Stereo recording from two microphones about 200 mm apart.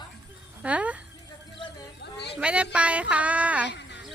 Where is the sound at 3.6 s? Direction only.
60° left (ahead or behind).